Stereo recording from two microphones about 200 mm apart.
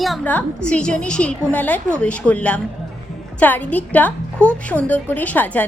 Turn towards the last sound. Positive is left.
turn(degrees=10)  # may be behind; listen again after turning